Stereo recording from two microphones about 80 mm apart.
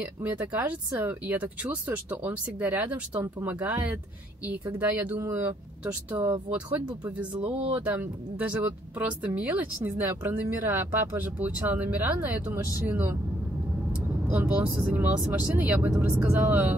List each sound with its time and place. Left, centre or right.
0.2 s speech: right
6.1 s speech: right
10.0 s speech: right
11.1 s speech: right
14.3 s speech: right